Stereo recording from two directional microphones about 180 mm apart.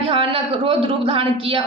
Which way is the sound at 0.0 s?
30° right (ahead or behind).